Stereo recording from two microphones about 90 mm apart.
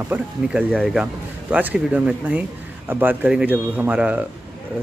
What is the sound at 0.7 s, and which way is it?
Speech, 5° left (ahead or behind).